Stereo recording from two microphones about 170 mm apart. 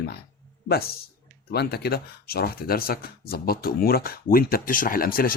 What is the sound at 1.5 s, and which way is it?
Speech, 70° left (ahead or behind).